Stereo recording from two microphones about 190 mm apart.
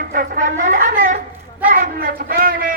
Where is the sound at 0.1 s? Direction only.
50° right (ahead or behind).